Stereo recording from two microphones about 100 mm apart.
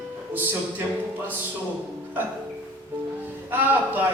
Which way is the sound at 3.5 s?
20° right (ahead or behind).